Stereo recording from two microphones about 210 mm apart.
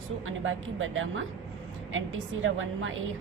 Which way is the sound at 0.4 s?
70° right (ahead or behind).